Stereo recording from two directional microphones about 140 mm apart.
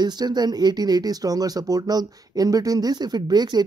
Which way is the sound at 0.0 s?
30° right (ahead or behind).